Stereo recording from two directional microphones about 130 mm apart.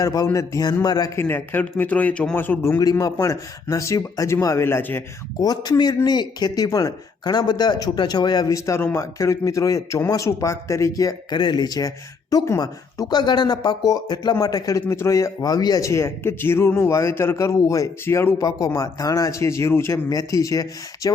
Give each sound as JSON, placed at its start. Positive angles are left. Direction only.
{"t": 0.0, "sound": "speech", "side_deg": 30}
{"t": 1.2, "sound": "a man's voice", "side_deg": 15}
{"t": 5.4, "sound": "speech", "side_deg": 30}